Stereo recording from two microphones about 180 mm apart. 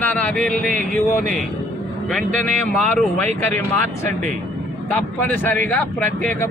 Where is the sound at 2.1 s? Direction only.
5° left (ahead or behind).